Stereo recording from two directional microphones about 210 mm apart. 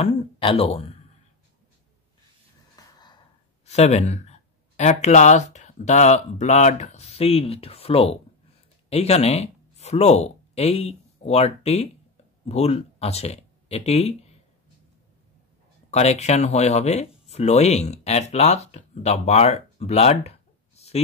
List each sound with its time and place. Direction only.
0.0 s speech: 25° left (ahead or behind)
2.7 s gasp: 20° left (ahead or behind)
3.6 s speech: 30° left (ahead or behind)
15.9 s speech: 30° left (ahead or behind)